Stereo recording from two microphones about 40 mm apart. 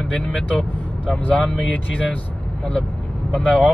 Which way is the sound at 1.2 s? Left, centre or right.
Left.